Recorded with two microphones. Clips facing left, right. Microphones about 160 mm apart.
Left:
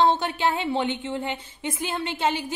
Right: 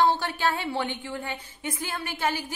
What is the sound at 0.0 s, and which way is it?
Speech, 20° left (ahead or behind).